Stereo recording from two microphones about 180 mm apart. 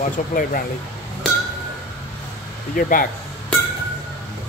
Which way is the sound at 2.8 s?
55° left (ahead or behind).